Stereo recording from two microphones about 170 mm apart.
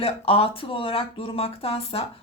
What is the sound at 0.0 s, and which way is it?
Speech, 35° left (ahead or behind).